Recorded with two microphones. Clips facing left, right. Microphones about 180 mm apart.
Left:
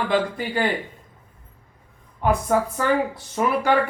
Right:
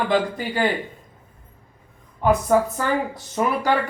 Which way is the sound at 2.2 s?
35° right (ahead or behind).